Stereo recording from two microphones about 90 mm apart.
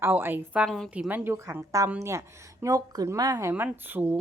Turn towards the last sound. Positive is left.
turn(degrees=-20)  # may be behind; listen again after turning